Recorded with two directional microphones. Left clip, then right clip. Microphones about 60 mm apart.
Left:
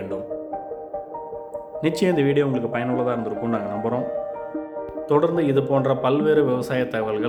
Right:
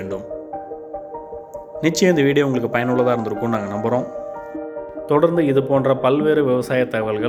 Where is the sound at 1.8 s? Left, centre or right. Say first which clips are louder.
Right 4 dB; right.